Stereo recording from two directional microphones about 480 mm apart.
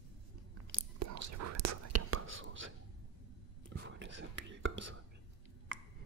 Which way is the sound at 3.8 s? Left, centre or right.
Right.